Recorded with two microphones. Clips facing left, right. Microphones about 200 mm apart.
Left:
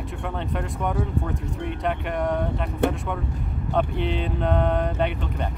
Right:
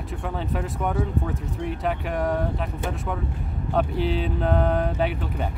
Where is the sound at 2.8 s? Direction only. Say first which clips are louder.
Left 10 dB; 65° left (ahead or behind).